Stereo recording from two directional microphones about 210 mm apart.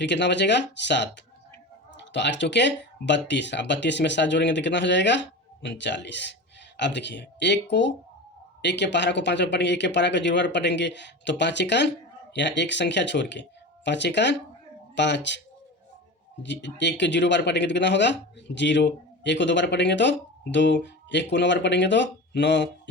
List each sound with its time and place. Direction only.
0.0 s speech: 55° left (ahead or behind)
16.4 s speech: 60° left (ahead or behind)